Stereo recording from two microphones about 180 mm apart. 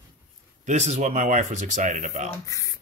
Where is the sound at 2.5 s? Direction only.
20° left (ahead or behind).